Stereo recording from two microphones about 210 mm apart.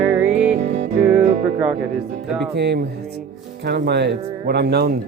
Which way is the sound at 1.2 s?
35° right (ahead or behind).